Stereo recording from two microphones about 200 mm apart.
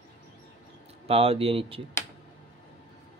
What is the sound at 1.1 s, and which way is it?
Speech, 30° right (ahead or behind).